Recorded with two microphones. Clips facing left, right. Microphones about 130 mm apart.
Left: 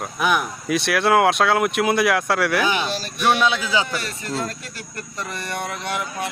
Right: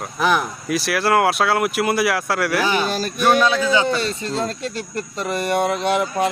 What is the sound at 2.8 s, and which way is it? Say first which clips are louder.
Speech: right 3 dB; 45° right (ahead or behind).